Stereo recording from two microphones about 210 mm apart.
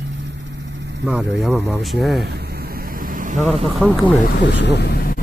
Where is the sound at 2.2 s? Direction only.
50° right (ahead or behind).